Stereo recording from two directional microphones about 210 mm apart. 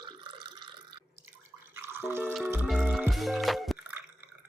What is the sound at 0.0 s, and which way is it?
Water, 20° right (ahead or behind).